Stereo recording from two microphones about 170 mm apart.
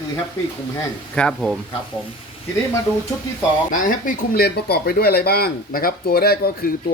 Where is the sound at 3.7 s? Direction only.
50° left (ahead or behind).